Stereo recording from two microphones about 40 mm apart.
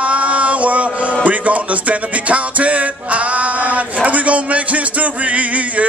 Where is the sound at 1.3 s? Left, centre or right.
Right.